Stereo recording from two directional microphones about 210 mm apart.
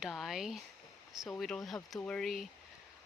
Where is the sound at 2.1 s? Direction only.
Centre (ahead or behind).